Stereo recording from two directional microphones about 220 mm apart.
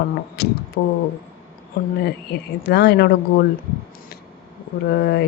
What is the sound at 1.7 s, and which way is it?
Speech, 45° left (ahead or behind).